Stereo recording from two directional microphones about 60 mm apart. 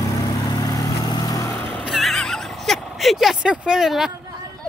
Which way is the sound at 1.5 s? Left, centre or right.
Left.